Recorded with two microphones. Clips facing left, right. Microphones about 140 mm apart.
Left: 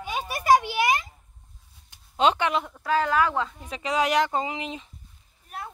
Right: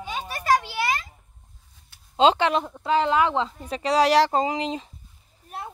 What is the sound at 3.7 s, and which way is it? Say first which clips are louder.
A woman's voice: right 5 dB; 35° right (ahead or behind).